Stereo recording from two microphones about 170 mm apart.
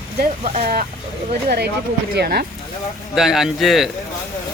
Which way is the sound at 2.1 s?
70° right (ahead or behind).